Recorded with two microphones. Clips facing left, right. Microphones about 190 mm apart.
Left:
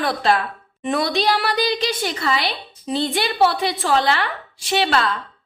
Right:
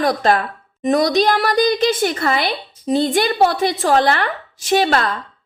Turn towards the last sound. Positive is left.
turn(degrees=-45)  # may be behind; listen again after turning